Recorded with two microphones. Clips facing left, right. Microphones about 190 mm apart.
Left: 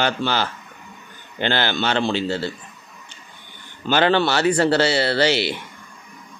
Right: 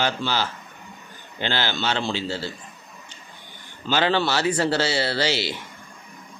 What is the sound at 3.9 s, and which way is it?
Speech, 60° left (ahead or behind).